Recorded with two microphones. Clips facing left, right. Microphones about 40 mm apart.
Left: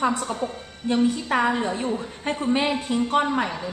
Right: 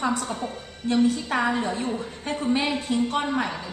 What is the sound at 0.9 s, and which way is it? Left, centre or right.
A woman's voice, centre.